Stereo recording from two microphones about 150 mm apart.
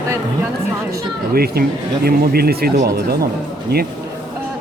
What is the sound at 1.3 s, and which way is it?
Speech, 90° right.